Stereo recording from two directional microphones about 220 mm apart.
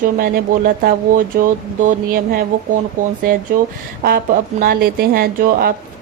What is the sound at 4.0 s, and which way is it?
Speech, 40° right (ahead or behind).